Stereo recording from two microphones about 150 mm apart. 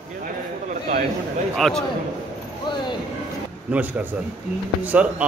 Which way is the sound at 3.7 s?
10° right (ahead or behind).